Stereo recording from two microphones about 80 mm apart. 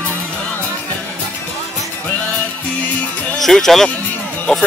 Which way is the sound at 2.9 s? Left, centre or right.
Left.